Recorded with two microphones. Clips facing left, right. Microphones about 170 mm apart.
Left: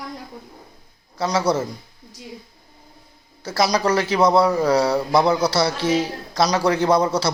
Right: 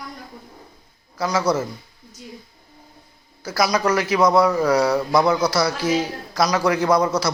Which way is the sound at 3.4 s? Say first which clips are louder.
Even; 30° left (ahead or behind).